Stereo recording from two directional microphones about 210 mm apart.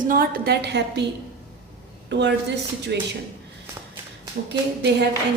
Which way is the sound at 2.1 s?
55° right (ahead or behind).